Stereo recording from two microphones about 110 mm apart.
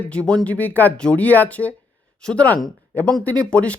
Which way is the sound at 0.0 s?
10° left (ahead or behind).